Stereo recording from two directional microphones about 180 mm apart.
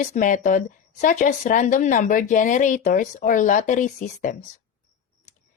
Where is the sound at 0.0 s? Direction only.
45° left (ahead or behind).